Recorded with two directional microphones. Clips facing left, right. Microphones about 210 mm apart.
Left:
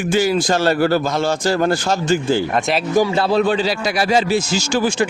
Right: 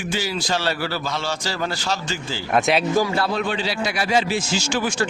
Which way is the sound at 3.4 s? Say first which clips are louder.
Left 7 dB; 40° left (ahead or behind).